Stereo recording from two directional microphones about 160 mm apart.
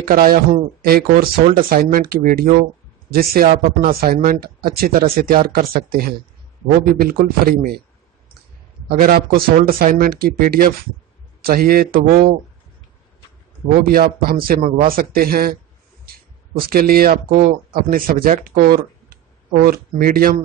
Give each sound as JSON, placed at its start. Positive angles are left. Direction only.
{"t": 0.0, "sound": "speech", "side_deg": -65}
{"t": 8.8, "sound": "speech", "side_deg": -65}
{"t": 13.8, "sound": "speech", "side_deg": -70}
{"t": 16.5, "sound": "speech", "side_deg": -70}